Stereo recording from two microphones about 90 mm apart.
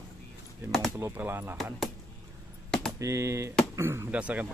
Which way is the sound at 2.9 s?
35° right (ahead or behind).